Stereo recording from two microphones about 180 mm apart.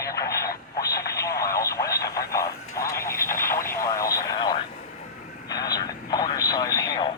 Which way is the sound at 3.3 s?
15° left (ahead or behind).